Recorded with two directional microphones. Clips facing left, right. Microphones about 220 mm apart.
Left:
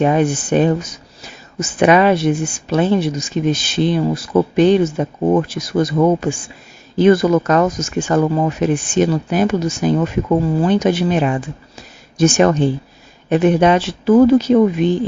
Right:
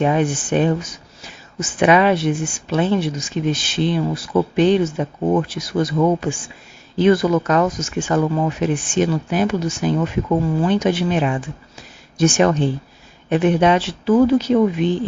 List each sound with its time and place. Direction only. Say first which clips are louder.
0.0 s speech: left 3 dB; 40° left (ahead or behind)